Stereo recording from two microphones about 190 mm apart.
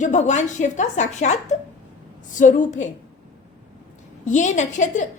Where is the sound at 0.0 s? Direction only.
40° left (ahead or behind).